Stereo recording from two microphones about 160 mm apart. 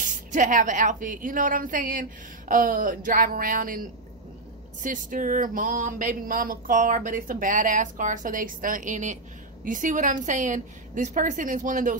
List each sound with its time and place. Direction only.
0.3 s speech: 55° right (ahead or behind)